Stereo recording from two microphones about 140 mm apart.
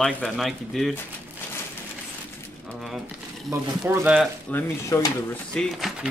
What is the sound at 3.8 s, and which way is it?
Speech, 10° right (ahead or behind).